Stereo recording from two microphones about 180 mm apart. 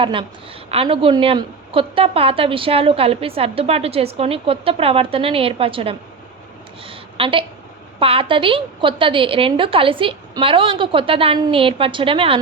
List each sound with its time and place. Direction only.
0.0 s a woman's voice: 30° right (ahead or behind)
6.8 s a sound: 30° right (ahead or behind)
7.9 s a woman's voice: 30° right (ahead or behind)